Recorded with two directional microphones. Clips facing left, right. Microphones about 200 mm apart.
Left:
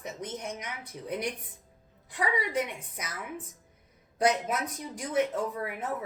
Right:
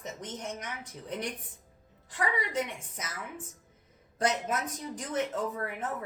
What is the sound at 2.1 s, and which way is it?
Speech, 10° left (ahead or behind).